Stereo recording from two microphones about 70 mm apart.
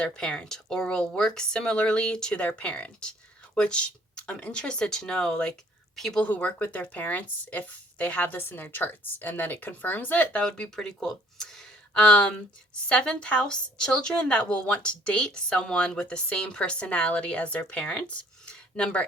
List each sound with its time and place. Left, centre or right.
0.0 s speech: centre
10.4 s speech: centre
18.4 s a sound: centre